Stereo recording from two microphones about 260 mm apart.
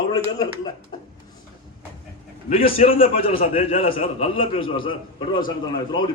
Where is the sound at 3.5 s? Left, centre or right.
Left.